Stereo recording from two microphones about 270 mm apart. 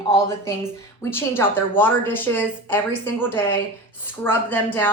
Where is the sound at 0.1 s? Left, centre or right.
Centre.